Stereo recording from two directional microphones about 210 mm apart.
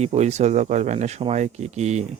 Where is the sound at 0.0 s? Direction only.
30° right (ahead or behind).